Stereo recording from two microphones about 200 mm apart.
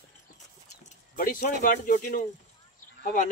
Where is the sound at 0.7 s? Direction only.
40° left (ahead or behind).